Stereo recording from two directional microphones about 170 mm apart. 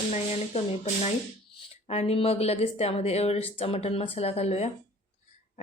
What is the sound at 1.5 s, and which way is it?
A woman's voice, 40° left (ahead or behind).